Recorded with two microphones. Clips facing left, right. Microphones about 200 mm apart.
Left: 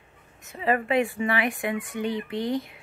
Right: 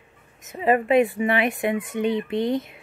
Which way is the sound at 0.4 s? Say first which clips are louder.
Right 5 dB; 20° right (ahead or behind).